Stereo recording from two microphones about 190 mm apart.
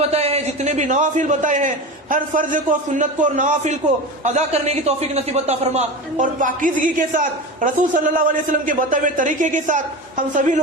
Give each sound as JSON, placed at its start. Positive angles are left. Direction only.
{"t": 0.1, "sound": "a man's voice", "side_deg": -35}